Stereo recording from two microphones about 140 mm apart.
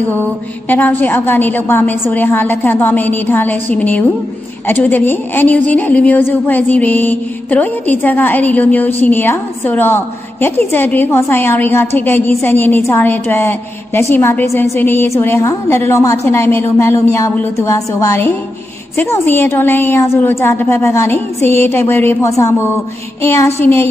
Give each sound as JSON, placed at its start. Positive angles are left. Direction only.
{"t": 0.7, "sound": "a woman's voice", "side_deg": 15}